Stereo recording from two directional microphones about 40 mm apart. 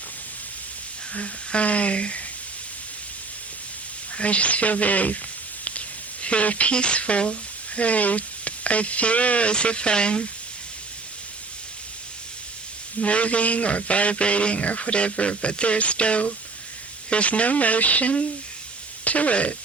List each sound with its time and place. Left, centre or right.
1.1 s a man's voice: left
4.1 s a man's voice: left
6.2 s a man's voice: left
13.0 s a man's voice: left